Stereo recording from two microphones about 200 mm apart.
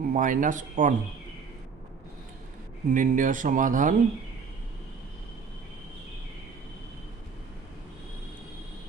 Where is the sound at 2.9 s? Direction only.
40° right (ahead or behind).